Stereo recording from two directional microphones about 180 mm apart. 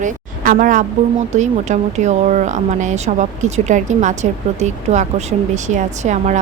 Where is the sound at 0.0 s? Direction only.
45° right (ahead or behind).